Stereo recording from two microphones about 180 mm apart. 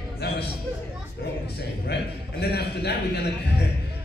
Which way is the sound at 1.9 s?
65° left (ahead or behind).